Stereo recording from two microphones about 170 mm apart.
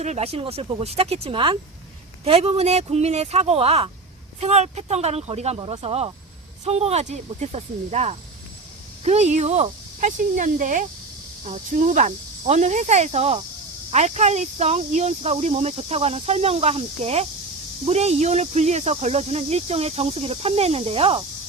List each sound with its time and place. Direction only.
0.0 s speech: 40° right (ahead or behind)